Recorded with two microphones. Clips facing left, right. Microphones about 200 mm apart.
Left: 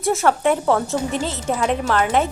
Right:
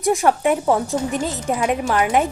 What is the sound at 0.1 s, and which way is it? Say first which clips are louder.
Speech: right 1 dB; 15° right (ahead or behind).